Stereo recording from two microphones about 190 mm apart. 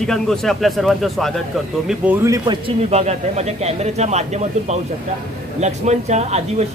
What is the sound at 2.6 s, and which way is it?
Speech, 35° right (ahead or behind).